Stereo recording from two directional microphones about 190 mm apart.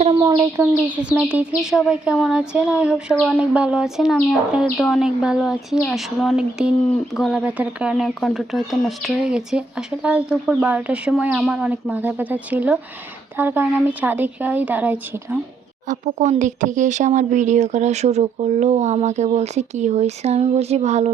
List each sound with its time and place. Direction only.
0.1 s speech: 20° right (ahead or behind)
15.9 s speech: 40° right (ahead or behind)